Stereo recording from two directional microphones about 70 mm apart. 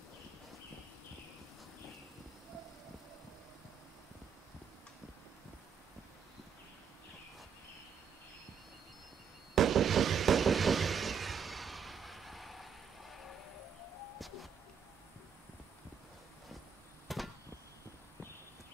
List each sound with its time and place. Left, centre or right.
9.6 s a sound: centre
14.1 s music: centre
17.1 s vehicle: centre